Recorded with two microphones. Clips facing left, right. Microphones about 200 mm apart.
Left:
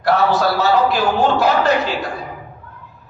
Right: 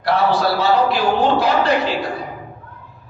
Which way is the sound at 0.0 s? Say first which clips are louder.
Left 1 dB; 45° left (ahead or behind).